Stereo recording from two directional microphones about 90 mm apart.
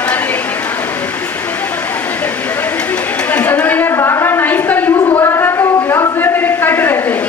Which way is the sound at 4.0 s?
30° left (ahead or behind).